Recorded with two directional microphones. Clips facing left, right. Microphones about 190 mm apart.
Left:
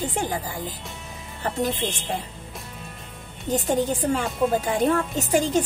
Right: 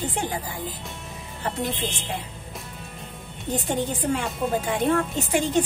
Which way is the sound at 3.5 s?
40° left (ahead or behind).